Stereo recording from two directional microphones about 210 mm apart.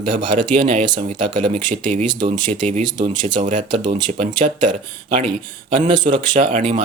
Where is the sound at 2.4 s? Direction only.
35° right (ahead or behind).